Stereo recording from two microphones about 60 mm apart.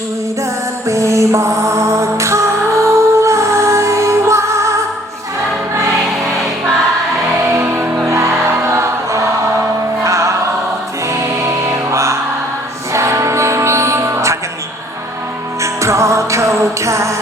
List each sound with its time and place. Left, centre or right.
0.9 s music: right
7.4 s music: right
8.0 s music: right
15.6 s music: right